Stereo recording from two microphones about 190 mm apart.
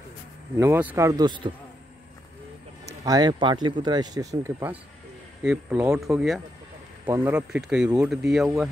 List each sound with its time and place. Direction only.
0.6 s speech: 10° right (ahead or behind)
2.8 s speech: 20° right (ahead or behind); by 6.4 s centre (ahead or behind)
7.1 s speech: 10° right (ahead or behind)